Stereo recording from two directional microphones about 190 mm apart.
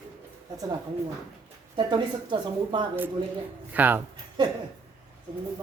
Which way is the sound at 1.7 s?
25° right (ahead or behind).